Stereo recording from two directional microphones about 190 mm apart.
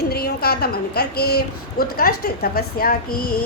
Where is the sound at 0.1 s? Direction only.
55° left (ahead or behind).